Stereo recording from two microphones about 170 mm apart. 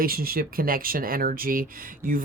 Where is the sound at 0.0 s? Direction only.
60° right (ahead or behind).